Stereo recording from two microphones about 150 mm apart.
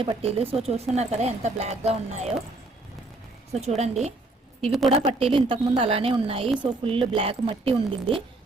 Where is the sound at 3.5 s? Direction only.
45° right (ahead or behind).